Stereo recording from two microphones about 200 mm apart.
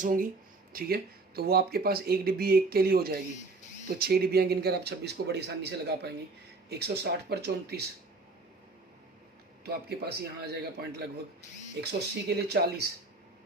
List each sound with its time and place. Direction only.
0.0 s speech: 40° right (ahead or behind)
9.6 s speech: 50° right (ahead or behind)